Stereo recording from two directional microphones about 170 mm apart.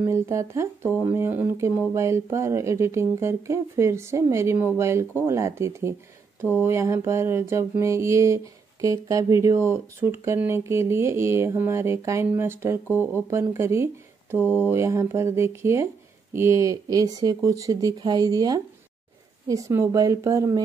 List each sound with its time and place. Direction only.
0.0 s speech: 15° right (ahead or behind)